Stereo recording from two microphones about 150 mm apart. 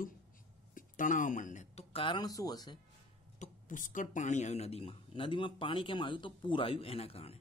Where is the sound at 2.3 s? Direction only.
25° left (ahead or behind).